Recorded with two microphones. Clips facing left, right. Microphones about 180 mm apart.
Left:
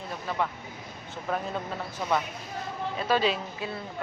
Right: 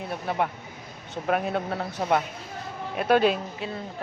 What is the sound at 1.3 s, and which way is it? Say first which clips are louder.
A man's voice: right 5 dB; 70° right (ahead or behind).